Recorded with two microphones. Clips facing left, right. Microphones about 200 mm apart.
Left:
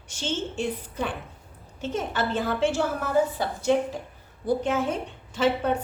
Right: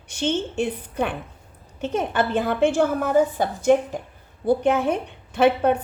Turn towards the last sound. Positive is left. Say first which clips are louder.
# right 5 dB
turn(degrees=-60)  # may be behind; listen again after turning